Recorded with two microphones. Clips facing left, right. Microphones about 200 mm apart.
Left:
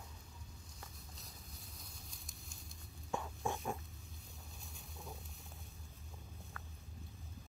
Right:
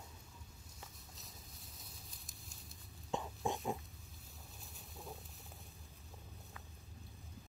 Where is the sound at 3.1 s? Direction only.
15° right (ahead or behind).